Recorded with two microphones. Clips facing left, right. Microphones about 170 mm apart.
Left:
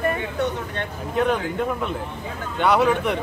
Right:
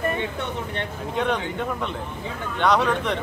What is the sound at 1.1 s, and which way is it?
Speech, centre (ahead or behind).